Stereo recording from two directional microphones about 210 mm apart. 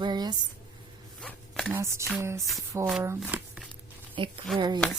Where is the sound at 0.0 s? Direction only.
20° right (ahead or behind).